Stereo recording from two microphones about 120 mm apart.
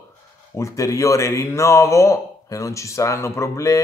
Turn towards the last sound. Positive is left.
turn(degrees=25)  # may be behind; listen again after turning